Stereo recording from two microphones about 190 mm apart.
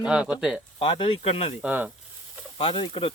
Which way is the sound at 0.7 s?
25° left (ahead or behind).